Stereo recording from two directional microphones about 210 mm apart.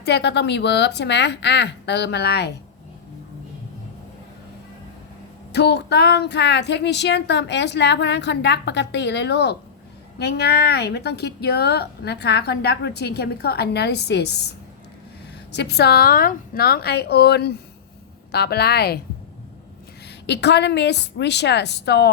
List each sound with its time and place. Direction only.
0.0 s speech: 55° left (ahead or behind)
5.5 s speech: 55° left (ahead or behind)
15.5 s speech: 50° left (ahead or behind)
20.2 s speech: 55° left (ahead or behind)